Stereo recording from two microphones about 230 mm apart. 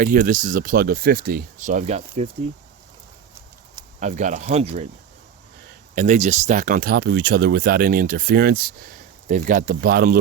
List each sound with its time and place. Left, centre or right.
0.0 s speech: right
4.0 s speech: right
5.9 s speech: right